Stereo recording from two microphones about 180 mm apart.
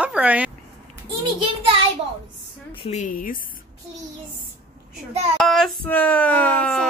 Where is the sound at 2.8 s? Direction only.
40° left (ahead or behind).